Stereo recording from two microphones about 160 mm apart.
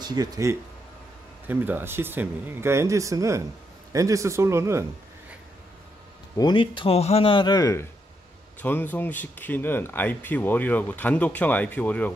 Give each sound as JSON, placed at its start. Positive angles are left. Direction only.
{"t": 0.1, "sound": "speech", "side_deg": -20}
{"t": 6.3, "sound": "a man's voice", "side_deg": 30}
{"t": 8.5, "sound": "speech", "side_deg": 10}